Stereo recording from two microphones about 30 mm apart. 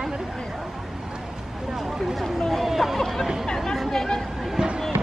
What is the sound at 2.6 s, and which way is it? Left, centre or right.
Hubbub, centre.